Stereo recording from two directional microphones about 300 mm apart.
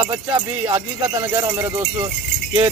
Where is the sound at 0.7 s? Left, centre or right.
Centre.